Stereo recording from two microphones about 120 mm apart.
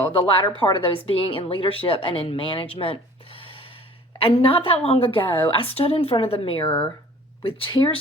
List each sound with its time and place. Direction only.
0.1 s a woman's voice: 50° left (ahead or behind)
6.7 s speech: 20° left (ahead or behind)
7.4 s a woman's voice: 45° left (ahead or behind)